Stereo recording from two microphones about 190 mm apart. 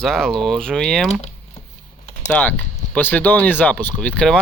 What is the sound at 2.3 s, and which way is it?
Speech, 10° left (ahead or behind).